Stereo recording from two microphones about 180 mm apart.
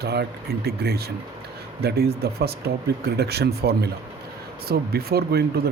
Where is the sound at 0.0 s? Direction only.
65° right (ahead or behind).